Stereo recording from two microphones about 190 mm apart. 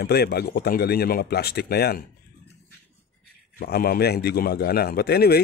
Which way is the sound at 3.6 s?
55° left (ahead or behind).